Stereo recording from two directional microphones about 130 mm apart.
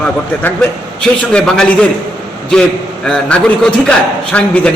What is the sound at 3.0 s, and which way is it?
A man's voice, 5° left (ahead or behind).